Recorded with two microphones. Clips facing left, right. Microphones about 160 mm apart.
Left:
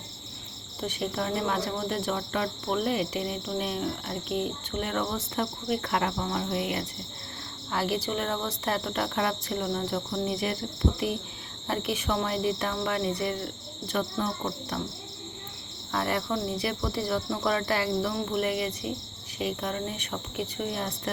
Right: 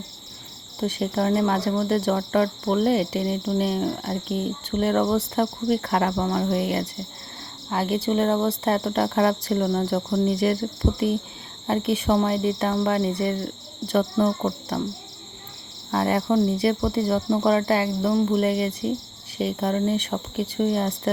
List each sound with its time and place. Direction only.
0.8 s cricket: 35° right (ahead or behind)
6.1 s cricket: 60° right (ahead or behind); by 6.8 s 40° right (ahead or behind)
7.7 s cricket: 25° right (ahead or behind); by 10.6 s 45° right (ahead or behind)
11.7 s cricket: 30° right (ahead or behind)
15.9 s cricket: 30° right (ahead or behind)